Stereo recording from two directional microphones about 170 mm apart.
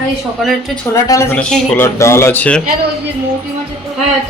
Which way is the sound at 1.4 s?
5° left (ahead or behind).